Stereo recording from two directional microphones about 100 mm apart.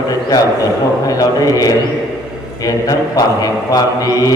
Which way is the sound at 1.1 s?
35° left (ahead or behind).